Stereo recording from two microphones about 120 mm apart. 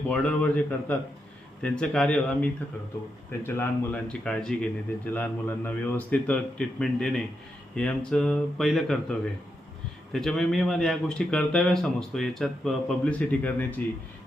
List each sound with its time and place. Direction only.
0.1 s a man's voice: 10° left (ahead or behind)
4.1 s a man's voice: 5° left (ahead or behind)